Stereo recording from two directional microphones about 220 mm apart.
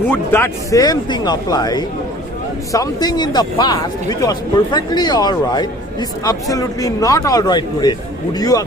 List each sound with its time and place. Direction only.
0.1 s speech: 10° left (ahead or behind)